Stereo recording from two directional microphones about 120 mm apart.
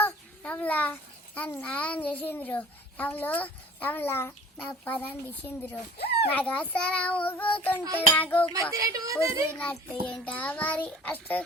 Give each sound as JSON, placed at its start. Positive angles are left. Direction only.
{"t": 0.0, "sound": "a sound", "side_deg": 10}
{"t": 1.4, "sound": "a child's voice", "side_deg": 10}
{"t": 8.7, "sound": "a woman's voice", "side_deg": -25}
{"t": 9.5, "sound": "a child's voice", "side_deg": 15}